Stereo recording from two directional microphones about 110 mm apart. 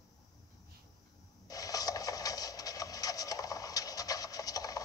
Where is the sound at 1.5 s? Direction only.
35° left (ahead or behind).